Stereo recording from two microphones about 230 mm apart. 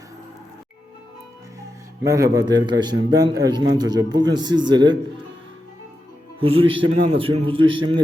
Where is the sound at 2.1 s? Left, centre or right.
Centre.